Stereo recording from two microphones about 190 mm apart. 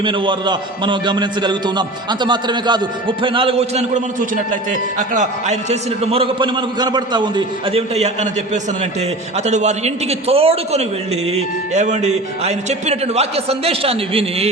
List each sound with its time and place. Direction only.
0.0 s a man's voice: 25° right (ahead or behind)
9.4 s a man's voice: 35° right (ahead or behind)